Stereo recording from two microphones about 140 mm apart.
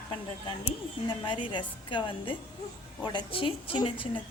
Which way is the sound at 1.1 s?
35° left (ahead or behind).